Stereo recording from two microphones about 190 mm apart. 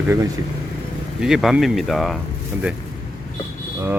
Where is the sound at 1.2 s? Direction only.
Centre (ahead or behind).